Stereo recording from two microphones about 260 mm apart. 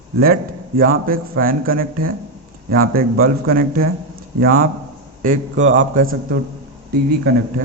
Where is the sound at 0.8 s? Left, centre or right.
Right.